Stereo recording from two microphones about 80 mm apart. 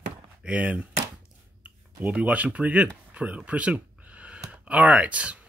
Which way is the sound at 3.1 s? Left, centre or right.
Centre.